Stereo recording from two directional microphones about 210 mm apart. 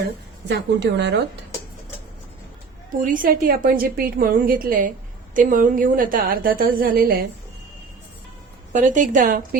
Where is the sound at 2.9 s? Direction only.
40° right (ahead or behind).